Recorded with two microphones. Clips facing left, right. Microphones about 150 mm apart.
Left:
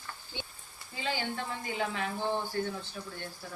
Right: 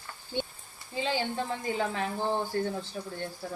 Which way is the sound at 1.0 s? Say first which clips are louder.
Right 4 dB; 25° right (ahead or behind).